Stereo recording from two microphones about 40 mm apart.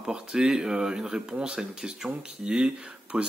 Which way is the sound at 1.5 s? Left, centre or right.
Centre.